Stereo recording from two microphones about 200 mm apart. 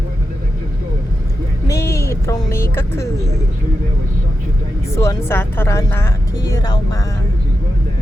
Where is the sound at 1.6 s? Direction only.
15° left (ahead or behind).